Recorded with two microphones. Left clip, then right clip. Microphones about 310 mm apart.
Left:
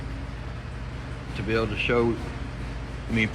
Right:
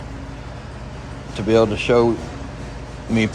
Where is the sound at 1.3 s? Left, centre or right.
Centre.